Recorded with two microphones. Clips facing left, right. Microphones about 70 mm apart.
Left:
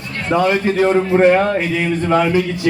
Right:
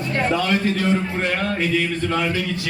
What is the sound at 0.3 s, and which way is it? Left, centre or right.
Speech, left.